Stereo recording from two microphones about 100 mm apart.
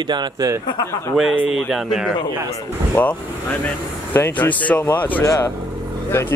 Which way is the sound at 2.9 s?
15° left (ahead or behind).